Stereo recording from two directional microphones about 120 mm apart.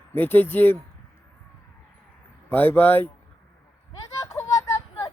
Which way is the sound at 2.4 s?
15° left (ahead or behind).